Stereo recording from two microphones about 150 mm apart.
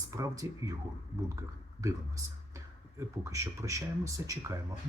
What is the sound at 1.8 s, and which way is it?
Speech, 20° right (ahead or behind).